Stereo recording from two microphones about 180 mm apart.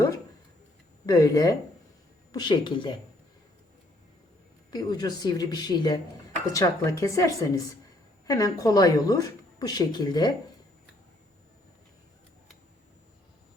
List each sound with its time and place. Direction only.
1.0 s speech: 20° left (ahead or behind)
4.7 s a woman's voice: 20° left (ahead or behind)